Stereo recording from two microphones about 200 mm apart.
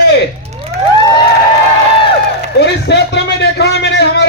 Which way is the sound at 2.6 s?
60° left (ahead or behind).